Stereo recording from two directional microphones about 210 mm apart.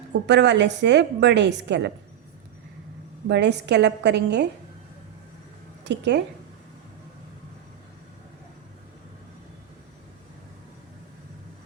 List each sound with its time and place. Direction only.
0.1 s a woman's voice: 55° right (ahead or behind)
3.2 s a woman's voice: 55° right (ahead or behind)
5.8 s a woman's voice: 55° right (ahead or behind)